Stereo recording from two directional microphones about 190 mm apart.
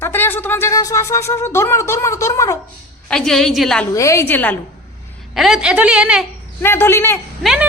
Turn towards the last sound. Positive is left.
turn(degrees=0)  # may be behind; listen again after turning